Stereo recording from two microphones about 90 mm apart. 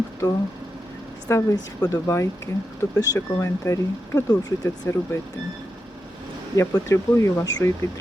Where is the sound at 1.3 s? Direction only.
35° left (ahead or behind).